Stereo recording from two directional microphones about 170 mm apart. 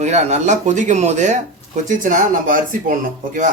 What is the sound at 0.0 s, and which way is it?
Speech, 40° right (ahead or behind).